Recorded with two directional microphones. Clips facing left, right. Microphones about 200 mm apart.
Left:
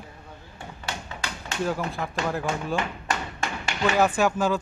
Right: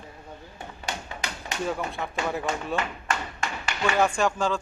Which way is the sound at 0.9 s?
20° right (ahead or behind).